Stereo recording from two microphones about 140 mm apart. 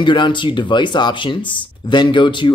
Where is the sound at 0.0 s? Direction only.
35° left (ahead or behind).